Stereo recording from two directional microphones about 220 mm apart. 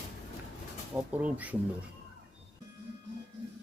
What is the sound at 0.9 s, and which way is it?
Speech, 5° right (ahead or behind).